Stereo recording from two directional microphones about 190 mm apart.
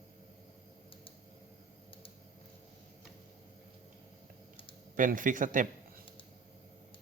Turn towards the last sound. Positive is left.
turn(degrees=-45)  # may be behind; listen again after turning